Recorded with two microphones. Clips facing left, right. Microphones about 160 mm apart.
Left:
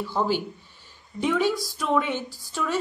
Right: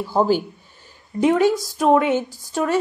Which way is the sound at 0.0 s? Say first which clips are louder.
Right 7 dB; 45° right (ahead or behind).